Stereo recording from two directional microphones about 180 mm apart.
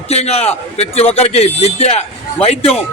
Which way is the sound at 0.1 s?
35° left (ahead or behind).